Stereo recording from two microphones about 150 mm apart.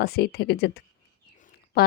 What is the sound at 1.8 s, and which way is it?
Speech, 85° left.